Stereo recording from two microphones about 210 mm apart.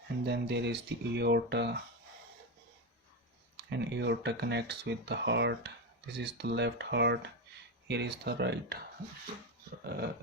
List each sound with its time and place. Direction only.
0.3 s speech: 55° right (ahead or behind)
3.6 s speech: 55° right (ahead or behind)
9.8 s speech: 45° right (ahead or behind)